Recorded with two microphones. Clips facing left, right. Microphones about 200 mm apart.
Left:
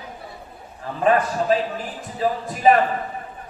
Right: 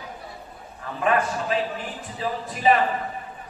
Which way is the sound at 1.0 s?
35° left (ahead or behind).